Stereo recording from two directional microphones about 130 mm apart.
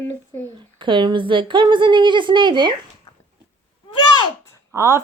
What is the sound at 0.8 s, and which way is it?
A woman's voice, 35° right (ahead or behind).